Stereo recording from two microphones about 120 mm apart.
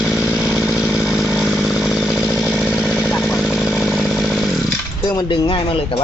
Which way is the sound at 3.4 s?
Centre (ahead or behind).